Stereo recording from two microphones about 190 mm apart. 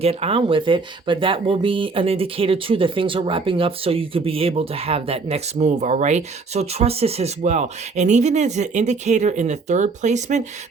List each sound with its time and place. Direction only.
0.0 s speech: 30° right (ahead or behind)